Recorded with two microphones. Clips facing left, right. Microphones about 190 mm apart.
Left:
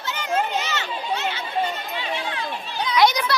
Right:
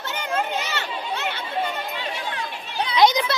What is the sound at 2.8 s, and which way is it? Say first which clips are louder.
Children playing: right 1 dB; 20° right (ahead or behind).